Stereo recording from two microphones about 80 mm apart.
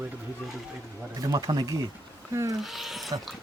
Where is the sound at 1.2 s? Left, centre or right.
Right.